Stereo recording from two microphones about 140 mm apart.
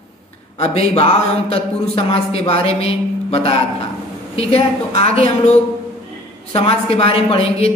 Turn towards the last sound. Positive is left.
turn(degrees=45)  # may be behind; listen again after turning